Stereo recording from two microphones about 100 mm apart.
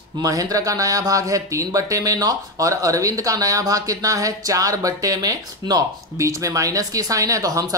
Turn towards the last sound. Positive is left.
turn(degrees=-35)  # may be behind; listen again after turning